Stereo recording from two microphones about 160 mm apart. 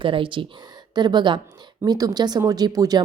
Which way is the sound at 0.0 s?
30° right (ahead or behind).